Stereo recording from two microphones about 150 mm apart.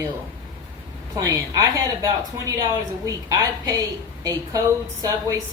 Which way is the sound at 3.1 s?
20° right (ahead or behind).